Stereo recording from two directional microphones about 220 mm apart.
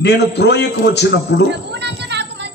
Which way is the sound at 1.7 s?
50° right (ahead or behind).